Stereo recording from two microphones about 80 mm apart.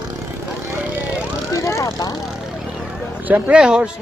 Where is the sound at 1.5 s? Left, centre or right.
Left.